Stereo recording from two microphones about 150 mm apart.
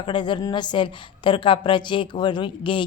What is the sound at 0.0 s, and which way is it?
A woman's voice, 30° left (ahead or behind).